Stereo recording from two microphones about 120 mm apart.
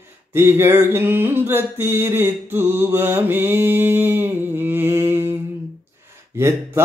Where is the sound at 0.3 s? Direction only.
20° right (ahead or behind).